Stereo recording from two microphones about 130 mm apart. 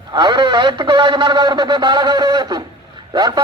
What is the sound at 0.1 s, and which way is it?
A man's voice, 35° right (ahead or behind).